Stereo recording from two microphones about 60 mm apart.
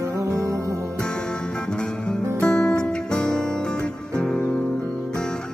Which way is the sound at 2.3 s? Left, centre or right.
Centre.